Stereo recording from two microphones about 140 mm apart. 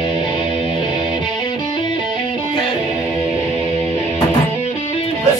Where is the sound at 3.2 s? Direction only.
45° right (ahead or behind).